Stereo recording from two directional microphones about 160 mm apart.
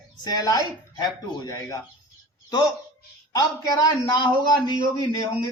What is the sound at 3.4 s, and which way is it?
Speech, 25° left (ahead or behind).